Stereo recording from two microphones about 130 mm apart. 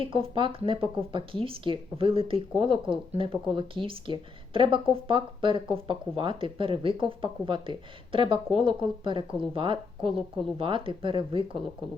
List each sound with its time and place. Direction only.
0.0 s speech: 45° right (ahead or behind)